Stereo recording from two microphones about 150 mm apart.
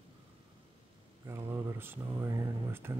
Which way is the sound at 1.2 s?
15° right (ahead or behind).